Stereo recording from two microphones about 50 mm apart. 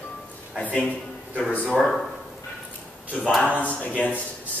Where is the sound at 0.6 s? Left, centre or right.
Left.